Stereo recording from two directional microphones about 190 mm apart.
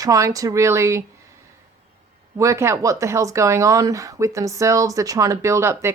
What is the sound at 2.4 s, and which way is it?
Speech, 15° right (ahead or behind).